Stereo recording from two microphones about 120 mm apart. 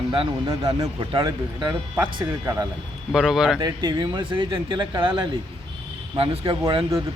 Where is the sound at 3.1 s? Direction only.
5° right (ahead or behind).